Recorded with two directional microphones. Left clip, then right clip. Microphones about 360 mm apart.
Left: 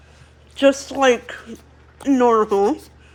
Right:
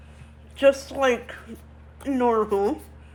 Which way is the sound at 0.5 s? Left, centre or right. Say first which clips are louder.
Left 3 dB; left.